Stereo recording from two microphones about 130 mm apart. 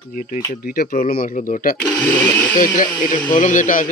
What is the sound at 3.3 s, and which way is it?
Speech, 75° left (ahead or behind).